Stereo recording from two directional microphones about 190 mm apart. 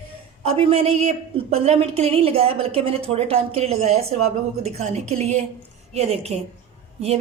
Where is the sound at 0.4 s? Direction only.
30° right (ahead or behind).